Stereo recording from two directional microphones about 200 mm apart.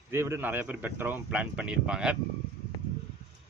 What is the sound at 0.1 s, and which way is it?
Speech, 10° right (ahead or behind).